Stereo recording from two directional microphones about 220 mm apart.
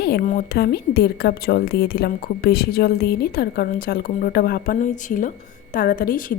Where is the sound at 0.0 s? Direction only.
45° left (ahead or behind).